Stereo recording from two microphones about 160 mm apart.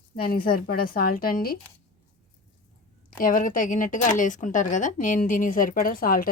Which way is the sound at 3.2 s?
60° left (ahead or behind).